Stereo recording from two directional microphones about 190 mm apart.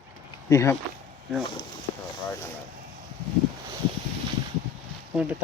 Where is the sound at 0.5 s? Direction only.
15° left (ahead or behind).